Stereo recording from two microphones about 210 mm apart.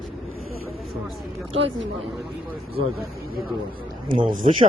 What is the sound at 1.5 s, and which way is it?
Speech, 65° right (ahead or behind).